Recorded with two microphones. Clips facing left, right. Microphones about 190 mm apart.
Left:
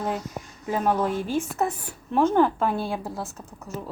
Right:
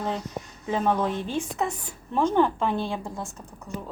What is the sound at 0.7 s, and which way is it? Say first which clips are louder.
A woman's voice: left 1 dB; 5° left (ahead or behind).